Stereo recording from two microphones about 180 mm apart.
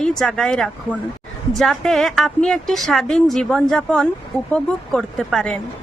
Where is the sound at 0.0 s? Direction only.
5° left (ahead or behind).